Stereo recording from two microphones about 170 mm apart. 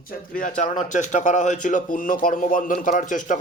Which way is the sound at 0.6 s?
45° left (ahead or behind).